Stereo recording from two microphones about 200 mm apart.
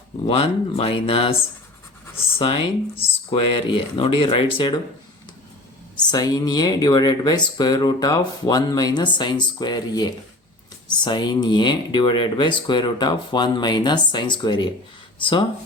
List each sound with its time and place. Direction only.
0.3 s speech: 25° left (ahead or behind)
2.4 s speech: 25° left (ahead or behind)
6.1 s speech: 20° left (ahead or behind)